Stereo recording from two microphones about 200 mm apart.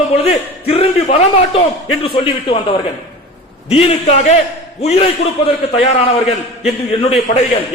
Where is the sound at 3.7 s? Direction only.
30° left (ahead or behind).